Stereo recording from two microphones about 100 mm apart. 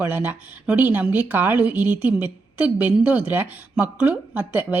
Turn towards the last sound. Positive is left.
turn(degrees=-15)  # may be behind; listen again after turning